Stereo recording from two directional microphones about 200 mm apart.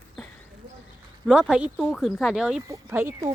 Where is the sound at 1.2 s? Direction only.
5° right (ahead or behind).